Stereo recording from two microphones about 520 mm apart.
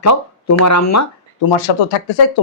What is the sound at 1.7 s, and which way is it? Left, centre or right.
Speech, left.